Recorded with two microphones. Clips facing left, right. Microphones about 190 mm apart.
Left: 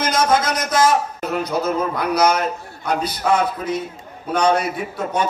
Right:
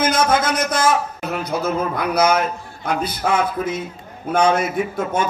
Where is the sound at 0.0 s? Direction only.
55° right (ahead or behind).